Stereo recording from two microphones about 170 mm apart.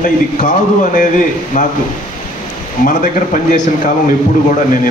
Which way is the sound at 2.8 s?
50° left (ahead or behind).